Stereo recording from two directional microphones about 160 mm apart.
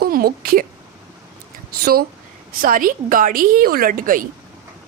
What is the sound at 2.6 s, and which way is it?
Speech, 60° right (ahead or behind).